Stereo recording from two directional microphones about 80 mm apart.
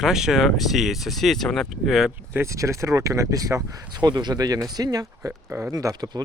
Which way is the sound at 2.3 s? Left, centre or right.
Right.